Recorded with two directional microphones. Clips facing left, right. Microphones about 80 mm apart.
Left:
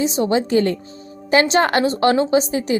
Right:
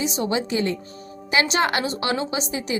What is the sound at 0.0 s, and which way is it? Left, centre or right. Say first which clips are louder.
A woman's voice: left 6 dB; left.